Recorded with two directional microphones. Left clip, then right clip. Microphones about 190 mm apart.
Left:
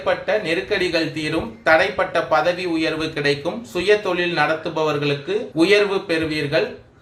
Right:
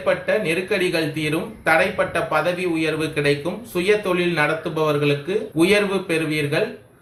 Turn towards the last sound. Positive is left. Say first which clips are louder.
# left 1 dB
turn(degrees=40)  # may be behind; listen again after turning